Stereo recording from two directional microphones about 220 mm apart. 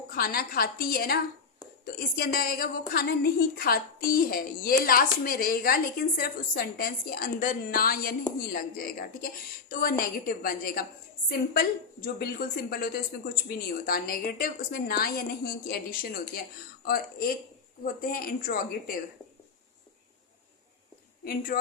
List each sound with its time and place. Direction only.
0.1 s a woman's voice: 45° left (ahead or behind)
21.2 s a woman's voice: 40° left (ahead or behind)